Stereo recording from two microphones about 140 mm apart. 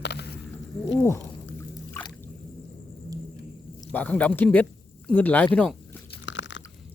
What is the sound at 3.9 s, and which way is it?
Speech, 10° left (ahead or behind).